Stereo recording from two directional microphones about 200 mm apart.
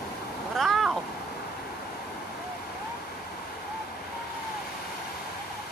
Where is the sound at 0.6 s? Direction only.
Centre (ahead or behind).